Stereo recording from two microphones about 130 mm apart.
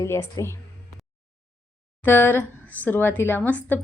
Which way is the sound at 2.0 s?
15° left (ahead or behind).